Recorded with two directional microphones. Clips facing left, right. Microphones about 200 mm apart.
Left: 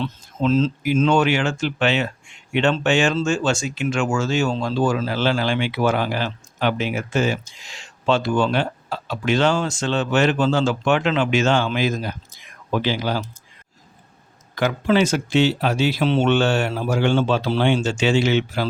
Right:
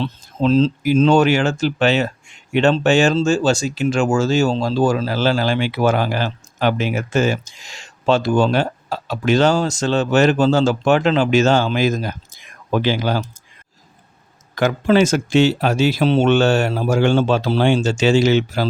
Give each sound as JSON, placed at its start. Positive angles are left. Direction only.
{"t": 0.0, "sound": "speech", "side_deg": -30}
{"t": 14.5, "sound": "speech", "side_deg": -45}